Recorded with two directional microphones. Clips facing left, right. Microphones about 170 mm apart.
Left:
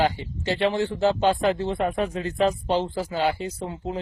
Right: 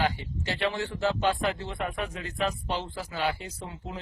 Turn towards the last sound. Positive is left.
turn(degrees=35)  # may be behind; listen again after turning